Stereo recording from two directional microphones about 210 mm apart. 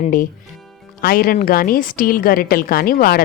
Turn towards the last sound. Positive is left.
turn(degrees=45)  # may be behind; listen again after turning